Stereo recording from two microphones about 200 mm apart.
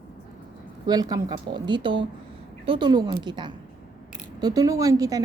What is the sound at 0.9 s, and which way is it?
A woman's voice, 20° right (ahead or behind).